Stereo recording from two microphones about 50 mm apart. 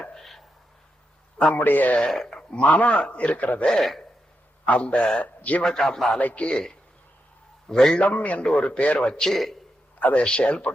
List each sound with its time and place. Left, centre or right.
0.1 s a sound: centre
1.5 s a man's voice: left
2.0 s a man's voice: centre
2.5 s a man's voice: left
3.7 s a man's voice: centre
4.6 s a man's voice: left
5.6 s a man's voice: centre
6.1 s a man's voice: left; by 8.0 s centre
8.0 s a man's voice: left
8.4 s a man's voice: centre
10.0 s a man's voice: left